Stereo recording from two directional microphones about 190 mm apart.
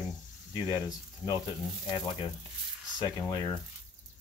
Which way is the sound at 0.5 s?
20° left (ahead or behind).